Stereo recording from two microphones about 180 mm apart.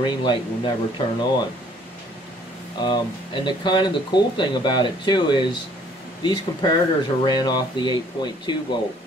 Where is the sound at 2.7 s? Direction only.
25° left (ahead or behind).